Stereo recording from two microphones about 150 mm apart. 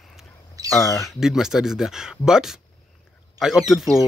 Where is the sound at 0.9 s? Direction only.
Centre (ahead or behind).